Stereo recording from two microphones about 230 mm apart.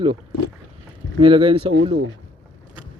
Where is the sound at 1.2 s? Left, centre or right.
Right.